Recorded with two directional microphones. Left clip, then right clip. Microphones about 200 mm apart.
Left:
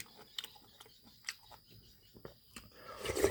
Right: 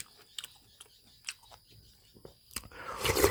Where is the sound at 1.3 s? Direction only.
5° right (ahead or behind).